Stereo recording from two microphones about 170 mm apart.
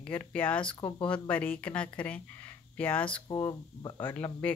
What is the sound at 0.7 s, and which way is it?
Speech, 25° left (ahead or behind).